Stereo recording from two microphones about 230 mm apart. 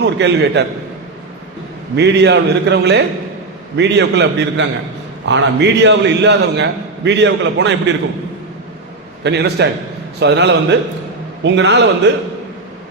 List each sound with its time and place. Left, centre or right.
0.0 s a man's voice: right
2.0 s a man's voice: right
9.2 s a man's voice: right